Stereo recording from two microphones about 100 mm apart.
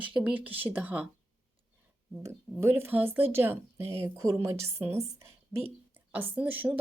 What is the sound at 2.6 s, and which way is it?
Speech, 25° right (ahead or behind).